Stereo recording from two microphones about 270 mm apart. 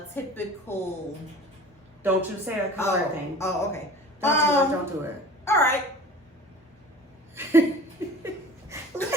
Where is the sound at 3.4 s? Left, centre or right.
Centre.